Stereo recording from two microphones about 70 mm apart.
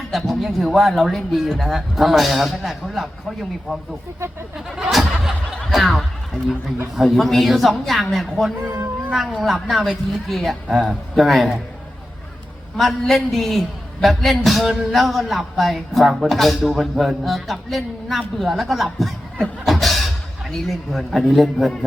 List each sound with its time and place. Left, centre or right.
0.1 s a man's voice: centre
4.7 s a sound: centre
5.7 s a man's voice: centre
8.6 s cat: right
9.4 s a man's voice: centre
12.7 s a man's voice: centre